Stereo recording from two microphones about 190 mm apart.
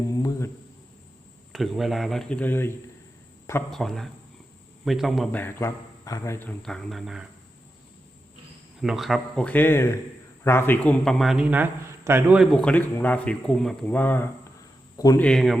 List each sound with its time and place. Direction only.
0.1 s a sound: 15° left (ahead or behind)
1.5 s a man's voice: centre (ahead or behind)
5.4 s speech: 10° left (ahead or behind)
8.8 s a man's voice: centre (ahead or behind); by 15.2 s 20° left (ahead or behind)
15.2 s a man's voice: centre (ahead or behind)